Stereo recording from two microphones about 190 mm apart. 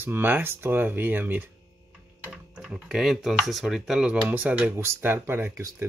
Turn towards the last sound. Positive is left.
turn(degrees=-15)  # may be behind; listen again after turning